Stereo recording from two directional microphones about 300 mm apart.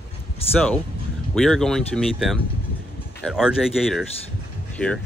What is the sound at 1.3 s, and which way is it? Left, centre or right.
Speech, centre.